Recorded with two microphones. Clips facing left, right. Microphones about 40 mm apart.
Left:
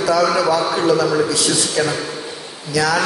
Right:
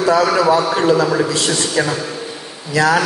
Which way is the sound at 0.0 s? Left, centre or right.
Right.